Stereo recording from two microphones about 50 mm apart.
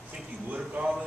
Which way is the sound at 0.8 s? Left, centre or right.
Right.